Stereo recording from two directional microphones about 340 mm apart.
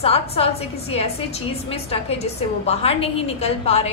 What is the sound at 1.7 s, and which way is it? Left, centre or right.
A woman's voice, centre.